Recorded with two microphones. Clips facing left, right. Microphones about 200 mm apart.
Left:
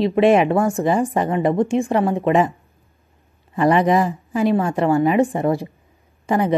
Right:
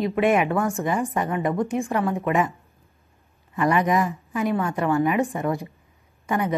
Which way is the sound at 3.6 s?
30° left (ahead or behind).